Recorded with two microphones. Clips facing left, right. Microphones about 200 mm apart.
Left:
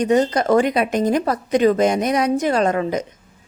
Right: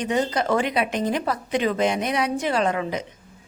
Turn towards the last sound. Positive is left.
turn(degrees=45)  # may be behind; listen again after turning